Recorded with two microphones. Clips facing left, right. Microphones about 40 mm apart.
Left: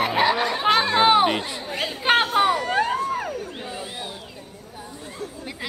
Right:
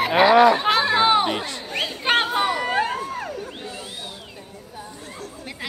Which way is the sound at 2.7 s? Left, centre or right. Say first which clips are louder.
Left 1 dB; centre.